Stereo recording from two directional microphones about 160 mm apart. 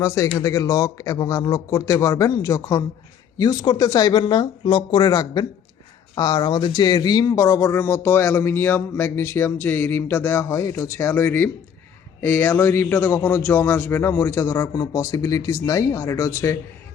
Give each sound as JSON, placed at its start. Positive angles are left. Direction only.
{"t": 0.0, "sound": "speech", "side_deg": 20}